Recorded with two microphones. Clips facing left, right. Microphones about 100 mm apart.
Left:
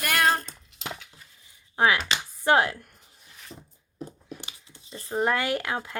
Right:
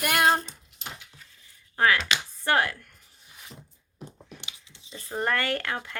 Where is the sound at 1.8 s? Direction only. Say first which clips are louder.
Left 1 dB; 15° left (ahead or behind).